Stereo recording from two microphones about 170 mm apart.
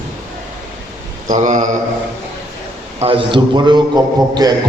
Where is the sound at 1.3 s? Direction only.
45° right (ahead or behind).